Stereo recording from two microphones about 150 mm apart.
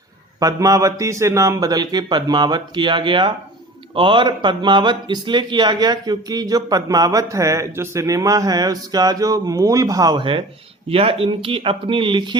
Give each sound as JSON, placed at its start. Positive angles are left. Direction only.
{"t": 0.3, "sound": "speech", "side_deg": -25}